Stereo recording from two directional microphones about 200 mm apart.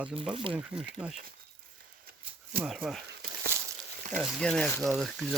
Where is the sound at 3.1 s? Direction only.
50° right (ahead or behind).